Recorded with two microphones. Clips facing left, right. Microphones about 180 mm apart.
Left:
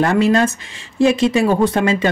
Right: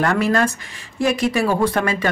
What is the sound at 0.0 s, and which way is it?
Speech, 25° left (ahead or behind).